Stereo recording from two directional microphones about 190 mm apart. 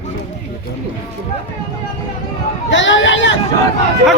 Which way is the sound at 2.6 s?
75° left (ahead or behind).